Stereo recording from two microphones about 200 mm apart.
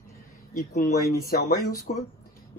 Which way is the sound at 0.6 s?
50° left (ahead or behind).